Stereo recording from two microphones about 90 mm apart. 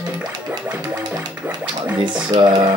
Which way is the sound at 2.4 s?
50° right (ahead or behind).